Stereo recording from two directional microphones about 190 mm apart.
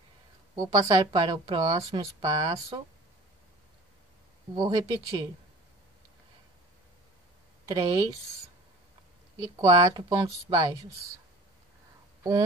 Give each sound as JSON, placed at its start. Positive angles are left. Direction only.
{"t": 0.6, "sound": "a woman's voice", "side_deg": -20}
{"t": 4.6, "sound": "a woman's voice", "side_deg": -20}
{"t": 7.6, "sound": "a woman's voice", "side_deg": -20}
{"t": 9.4, "sound": "a woman's voice", "side_deg": -20}
{"t": 12.2, "sound": "speech", "side_deg": -20}